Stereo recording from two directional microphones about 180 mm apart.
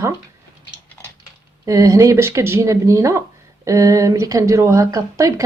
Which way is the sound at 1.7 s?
20° right (ahead or behind).